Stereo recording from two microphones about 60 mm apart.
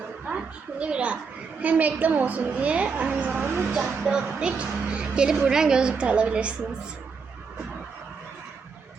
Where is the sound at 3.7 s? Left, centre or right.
Centre.